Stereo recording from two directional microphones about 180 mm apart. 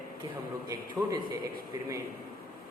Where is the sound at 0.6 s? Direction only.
20° right (ahead or behind).